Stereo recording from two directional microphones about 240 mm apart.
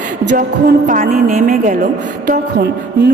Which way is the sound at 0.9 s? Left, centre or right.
Right.